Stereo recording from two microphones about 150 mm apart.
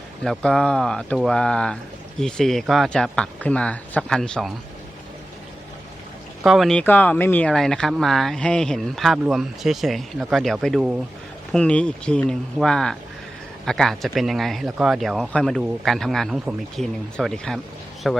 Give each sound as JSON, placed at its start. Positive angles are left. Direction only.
{"t": 0.2, "sound": "speech", "side_deg": 5}
{"t": 6.4, "sound": "speech", "side_deg": 0}